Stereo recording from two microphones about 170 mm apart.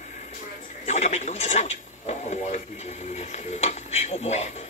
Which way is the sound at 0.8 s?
40° left (ahead or behind).